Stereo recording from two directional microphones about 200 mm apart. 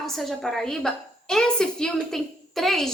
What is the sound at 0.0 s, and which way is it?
A woman's voice, centre (ahead or behind).